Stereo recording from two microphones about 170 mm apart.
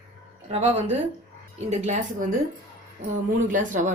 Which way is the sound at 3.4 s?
50° right (ahead or behind).